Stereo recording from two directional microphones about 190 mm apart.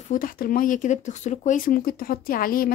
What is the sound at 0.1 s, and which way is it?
A woman's voice, 45° left (ahead or behind).